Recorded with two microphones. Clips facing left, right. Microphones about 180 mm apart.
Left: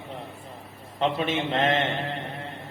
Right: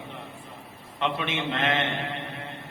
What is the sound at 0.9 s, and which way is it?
Mantra, 35° left (ahead or behind).